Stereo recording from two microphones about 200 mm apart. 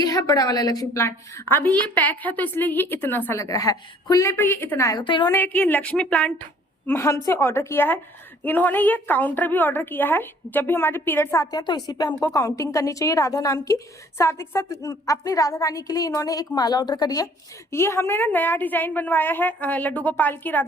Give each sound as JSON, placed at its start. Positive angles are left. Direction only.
{"t": 0.0, "sound": "a woman's voice", "side_deg": 20}
{"t": 5.3, "sound": "a woman's voice", "side_deg": 10}